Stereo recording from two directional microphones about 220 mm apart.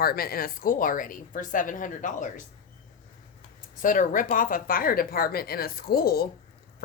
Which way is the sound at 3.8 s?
35° left (ahead or behind).